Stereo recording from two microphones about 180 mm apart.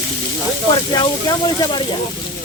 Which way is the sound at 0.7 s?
20° left (ahead or behind).